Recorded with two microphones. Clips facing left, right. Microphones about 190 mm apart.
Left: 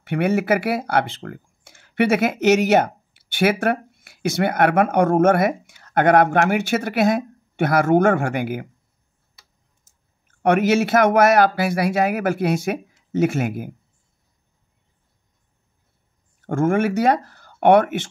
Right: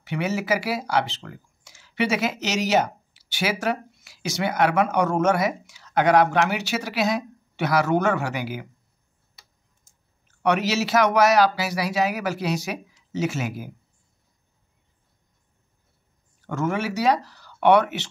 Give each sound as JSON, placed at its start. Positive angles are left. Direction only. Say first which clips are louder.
{"t": 0.0, "sound": "speech", "louder": "left 6 dB", "side_deg": 55}
{"t": 10.2, "sound": "speech", "louder": "left 5 dB", "side_deg": 50}
{"t": 16.3, "sound": "speech", "louder": "left 7 dB", "side_deg": 50}